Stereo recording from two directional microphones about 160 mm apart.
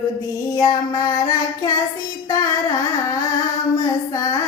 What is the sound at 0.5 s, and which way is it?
Child singing, 25° left (ahead or behind).